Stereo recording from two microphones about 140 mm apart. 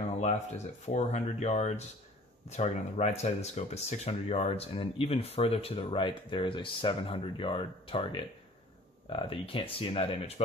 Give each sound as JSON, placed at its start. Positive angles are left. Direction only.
{"t": 0.8, "sound": "speech", "side_deg": 50}